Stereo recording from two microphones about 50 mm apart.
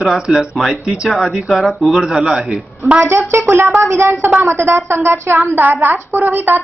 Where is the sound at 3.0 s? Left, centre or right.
Right.